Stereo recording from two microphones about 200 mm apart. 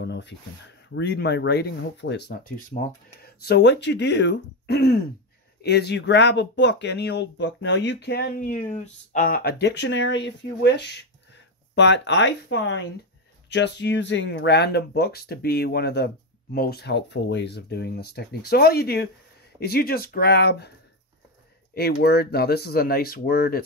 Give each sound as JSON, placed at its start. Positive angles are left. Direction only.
{"t": 0.0, "sound": "speech", "side_deg": 60}
{"t": 21.7, "sound": "speech", "side_deg": 55}